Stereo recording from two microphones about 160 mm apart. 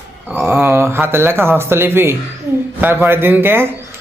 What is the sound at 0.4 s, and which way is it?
Speech, 15° right (ahead or behind).